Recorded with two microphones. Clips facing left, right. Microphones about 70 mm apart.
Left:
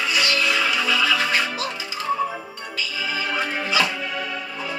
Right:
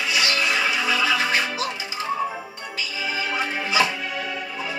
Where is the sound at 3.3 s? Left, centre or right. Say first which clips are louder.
Left 1 dB; centre.